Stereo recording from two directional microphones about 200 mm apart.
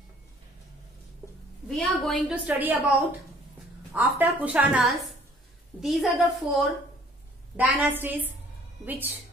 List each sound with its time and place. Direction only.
1.7 s a woman's voice: centre (ahead or behind)